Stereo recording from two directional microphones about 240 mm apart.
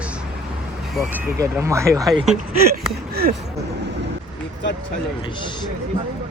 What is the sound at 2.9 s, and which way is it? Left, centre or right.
Speech, right.